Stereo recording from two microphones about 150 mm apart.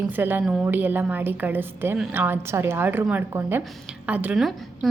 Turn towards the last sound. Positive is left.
turn(degrees=0)  # may be behind; listen again after turning